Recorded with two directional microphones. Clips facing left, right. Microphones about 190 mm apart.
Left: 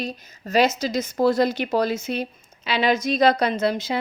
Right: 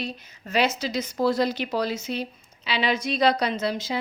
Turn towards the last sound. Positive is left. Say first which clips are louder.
# left 4 dB
turn(degrees=55)  # may be behind; listen again after turning